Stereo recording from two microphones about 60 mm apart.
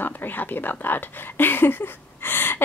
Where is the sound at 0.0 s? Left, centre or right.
Left.